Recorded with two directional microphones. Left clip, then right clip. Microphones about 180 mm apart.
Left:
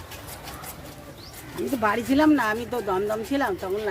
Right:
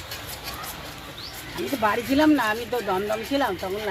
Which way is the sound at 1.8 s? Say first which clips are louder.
Even; 25° left (ahead or behind).